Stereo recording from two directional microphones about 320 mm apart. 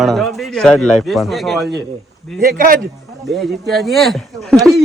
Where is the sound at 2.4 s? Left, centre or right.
Right.